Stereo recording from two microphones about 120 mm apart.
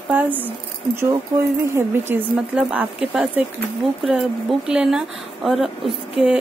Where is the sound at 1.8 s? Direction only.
20° right (ahead or behind).